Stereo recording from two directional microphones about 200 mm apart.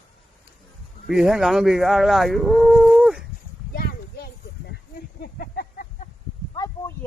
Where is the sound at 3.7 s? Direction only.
50° left (ahead or behind).